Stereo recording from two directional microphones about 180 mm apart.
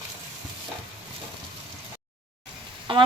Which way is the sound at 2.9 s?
30° right (ahead or behind).